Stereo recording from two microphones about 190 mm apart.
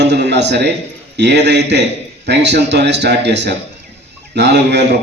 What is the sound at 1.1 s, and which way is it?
Speech, 65° right (ahead or behind).